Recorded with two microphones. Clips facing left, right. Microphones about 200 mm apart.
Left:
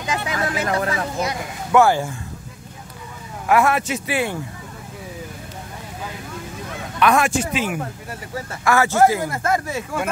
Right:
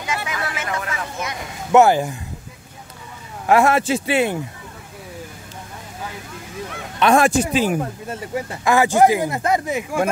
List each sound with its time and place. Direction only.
0.1 s a sound: 35° left (ahead or behind)
1.7 s speech: 20° right (ahead or behind)
3.4 s speech: 25° right (ahead or behind)
7.0 s speech: 30° right (ahead or behind)
8.1 s speech: 20° right (ahead or behind)